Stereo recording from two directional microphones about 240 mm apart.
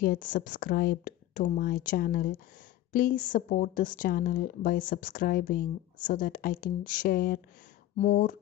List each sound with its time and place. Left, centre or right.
0.0 s speech: left